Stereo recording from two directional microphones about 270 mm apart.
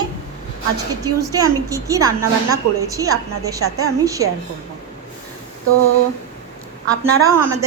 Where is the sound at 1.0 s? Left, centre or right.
Centre.